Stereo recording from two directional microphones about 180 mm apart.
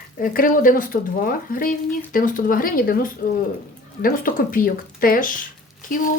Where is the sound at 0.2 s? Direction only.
50° left (ahead or behind).